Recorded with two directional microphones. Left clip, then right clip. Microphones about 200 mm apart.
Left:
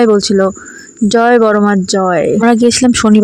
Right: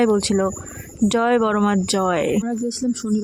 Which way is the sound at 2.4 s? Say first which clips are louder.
Left 16 dB; 50° left (ahead or behind).